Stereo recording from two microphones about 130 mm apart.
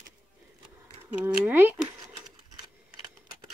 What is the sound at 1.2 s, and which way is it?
Speech, 15° right (ahead or behind).